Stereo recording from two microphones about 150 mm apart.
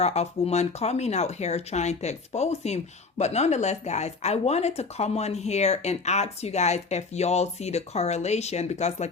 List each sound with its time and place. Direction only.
0.0 s speech: 45° left (ahead or behind)